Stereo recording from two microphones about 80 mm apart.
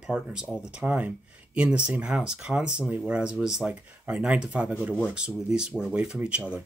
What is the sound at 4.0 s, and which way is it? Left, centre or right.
Speech, centre.